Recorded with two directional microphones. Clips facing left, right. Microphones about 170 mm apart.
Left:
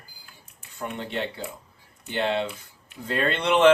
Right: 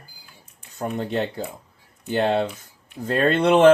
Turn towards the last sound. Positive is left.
turn(degrees=-45)  # may be behind; listen again after turning